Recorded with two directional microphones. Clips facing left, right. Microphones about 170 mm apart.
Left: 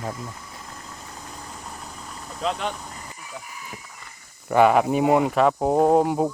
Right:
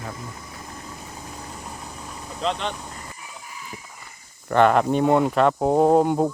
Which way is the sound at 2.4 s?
5° left (ahead or behind).